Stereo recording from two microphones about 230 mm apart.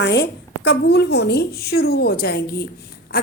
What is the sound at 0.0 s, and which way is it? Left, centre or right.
A woman's voice, left.